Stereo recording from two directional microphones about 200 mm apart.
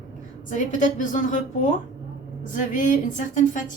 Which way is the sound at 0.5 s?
40° left (ahead or behind).